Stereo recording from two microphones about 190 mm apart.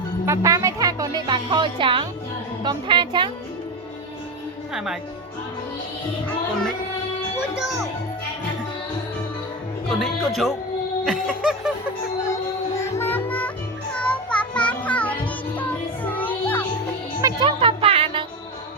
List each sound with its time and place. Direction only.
0.3 s speech: 15° right (ahead or behind)
4.7 s speech: centre (ahead or behind)
9.9 s speech: centre (ahead or behind)
11.0 s a sound: centre (ahead or behind)
12.3 s music: 15° left (ahead or behind)
13.9 s child singing: 5° left (ahead or behind)
16.0 s music: 10° left (ahead or behind)
17.2 s music: 20° right (ahead or behind)